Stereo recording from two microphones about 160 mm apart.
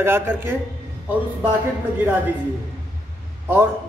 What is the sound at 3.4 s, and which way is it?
Speech, 15° right (ahead or behind).